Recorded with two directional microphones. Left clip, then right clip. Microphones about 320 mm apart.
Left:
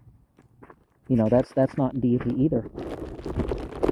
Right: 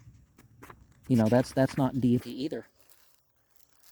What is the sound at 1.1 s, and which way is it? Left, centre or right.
Speech, right.